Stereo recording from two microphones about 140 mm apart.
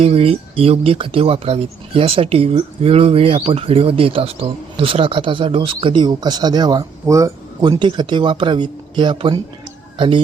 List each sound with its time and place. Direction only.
0.0 s speech: 45° right (ahead or behind)